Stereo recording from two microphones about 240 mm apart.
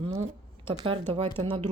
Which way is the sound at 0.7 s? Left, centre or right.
Right.